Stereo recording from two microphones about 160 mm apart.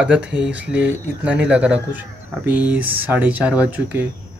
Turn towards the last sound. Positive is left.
turn(degrees=-10)  # may be behind; listen again after turning